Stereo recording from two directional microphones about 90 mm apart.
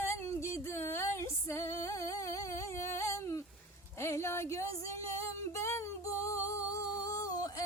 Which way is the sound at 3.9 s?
30° left (ahead or behind).